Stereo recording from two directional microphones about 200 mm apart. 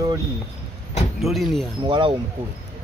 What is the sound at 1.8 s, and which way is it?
Speech, 25° right (ahead or behind).